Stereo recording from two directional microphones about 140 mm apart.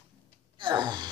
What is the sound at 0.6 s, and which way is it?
Speech, 35° right (ahead or behind).